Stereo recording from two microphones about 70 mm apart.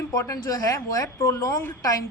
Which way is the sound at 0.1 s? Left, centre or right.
Left.